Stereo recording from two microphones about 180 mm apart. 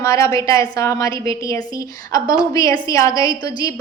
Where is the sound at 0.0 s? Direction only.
15° left (ahead or behind).